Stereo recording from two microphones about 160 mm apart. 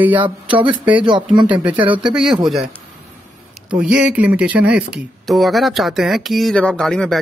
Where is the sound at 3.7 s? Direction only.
10° right (ahead or behind).